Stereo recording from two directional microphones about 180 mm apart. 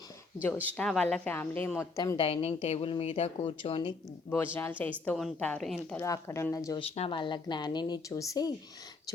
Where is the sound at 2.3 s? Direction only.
35° left (ahead or behind).